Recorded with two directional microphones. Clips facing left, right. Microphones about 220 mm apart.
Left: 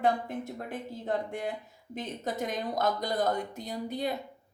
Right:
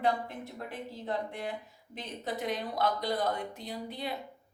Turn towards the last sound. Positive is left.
turn(degrees=45)  # may be behind; listen again after turning